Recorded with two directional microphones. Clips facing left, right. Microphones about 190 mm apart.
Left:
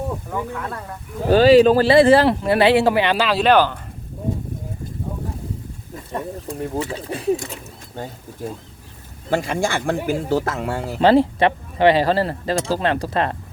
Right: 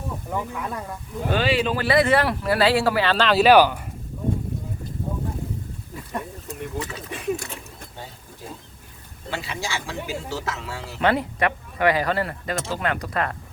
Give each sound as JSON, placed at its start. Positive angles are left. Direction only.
{"t": 0.3, "sound": "speech", "side_deg": -15}
{"t": 1.3, "sound": "speech", "side_deg": 40}
{"t": 1.9, "sound": "speech", "side_deg": 30}
{"t": 3.2, "sound": "speech", "side_deg": -5}
{"t": 6.5, "sound": "speech", "side_deg": 30}
{"t": 9.3, "sound": "speech", "side_deg": 50}
{"t": 11.0, "sound": "speech", "side_deg": 30}